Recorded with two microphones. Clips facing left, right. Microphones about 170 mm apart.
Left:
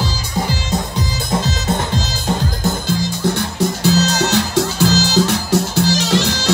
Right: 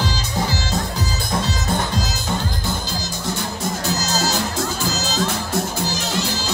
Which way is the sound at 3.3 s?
75° left (ahead or behind).